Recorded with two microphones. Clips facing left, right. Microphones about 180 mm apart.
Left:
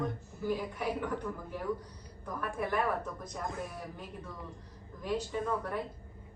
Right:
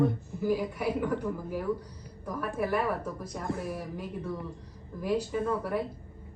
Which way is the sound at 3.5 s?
20° left (ahead or behind).